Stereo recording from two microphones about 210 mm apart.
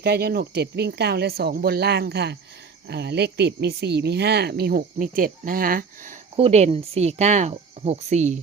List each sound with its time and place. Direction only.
0.0 s speech: 50° right (ahead or behind)
6.3 s speech: 30° right (ahead or behind)